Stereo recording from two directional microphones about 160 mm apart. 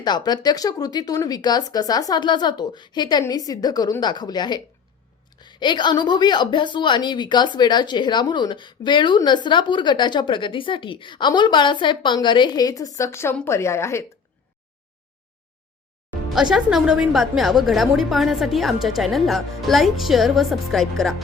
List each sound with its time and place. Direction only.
0.0 s a woman's voice: 25° left (ahead or behind)
16.3 s a woman's voice: 5° right (ahead or behind)